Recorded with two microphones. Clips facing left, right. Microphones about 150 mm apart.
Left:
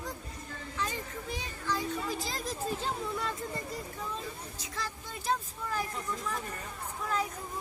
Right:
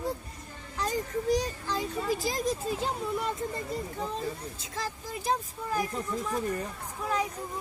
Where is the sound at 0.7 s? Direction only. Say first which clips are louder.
Right 7 dB; 40° right (ahead or behind).